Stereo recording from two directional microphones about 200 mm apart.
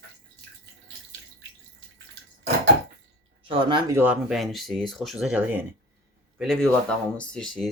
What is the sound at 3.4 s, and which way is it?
Speech, 25° right (ahead or behind).